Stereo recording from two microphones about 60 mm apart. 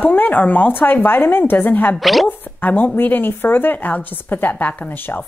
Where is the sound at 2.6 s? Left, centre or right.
Left.